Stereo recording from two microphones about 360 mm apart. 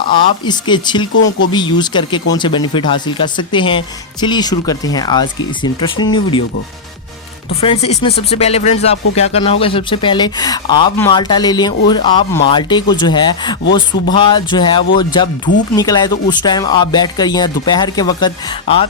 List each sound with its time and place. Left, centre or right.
0.4 s speech: centre
1.1 s speech: left
1.5 s speech: centre
7.6 s speech: centre